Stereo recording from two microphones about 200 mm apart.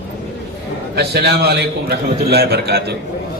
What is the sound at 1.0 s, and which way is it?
A man's voice, 55° right (ahead or behind).